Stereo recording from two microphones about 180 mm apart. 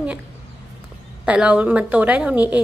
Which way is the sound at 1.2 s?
5° right (ahead or behind).